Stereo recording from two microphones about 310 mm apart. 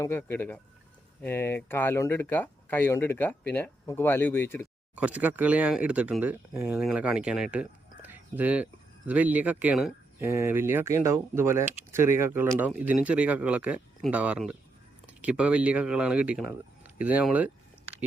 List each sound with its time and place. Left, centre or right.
0.0 s speech: centre
4.9 s speech: centre